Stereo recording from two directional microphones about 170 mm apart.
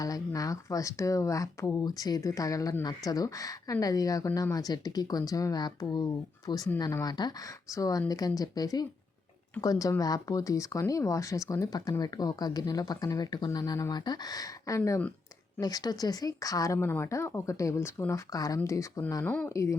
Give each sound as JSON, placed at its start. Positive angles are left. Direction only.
{"t": 0.0, "sound": "speech", "side_deg": 20}